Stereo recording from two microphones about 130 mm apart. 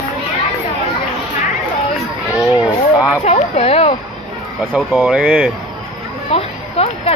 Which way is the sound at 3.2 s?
50° left (ahead or behind).